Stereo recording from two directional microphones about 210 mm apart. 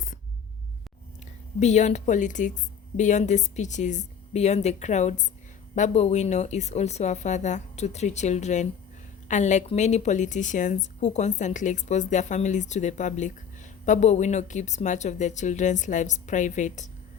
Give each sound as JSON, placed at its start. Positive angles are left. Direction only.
{"t": 1.5, "sound": "a woman's voice", "side_deg": 35}